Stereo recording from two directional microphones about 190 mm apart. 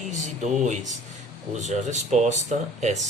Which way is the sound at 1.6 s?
40° right (ahead or behind).